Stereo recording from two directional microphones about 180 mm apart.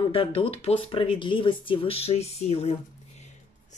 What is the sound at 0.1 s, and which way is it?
Speech, 30° left (ahead or behind).